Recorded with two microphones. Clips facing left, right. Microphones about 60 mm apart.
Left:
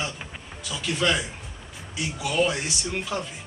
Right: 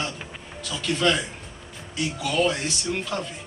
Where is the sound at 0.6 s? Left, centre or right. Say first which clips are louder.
Right 2 dB; centre.